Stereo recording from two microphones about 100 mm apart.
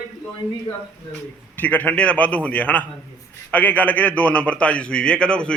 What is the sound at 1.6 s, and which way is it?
A man's voice, 15° left (ahead or behind).